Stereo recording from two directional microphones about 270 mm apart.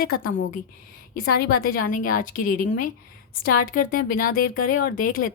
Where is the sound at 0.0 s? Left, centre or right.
Left.